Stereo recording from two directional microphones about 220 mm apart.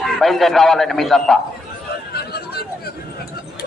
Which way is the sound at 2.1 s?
45° left (ahead or behind).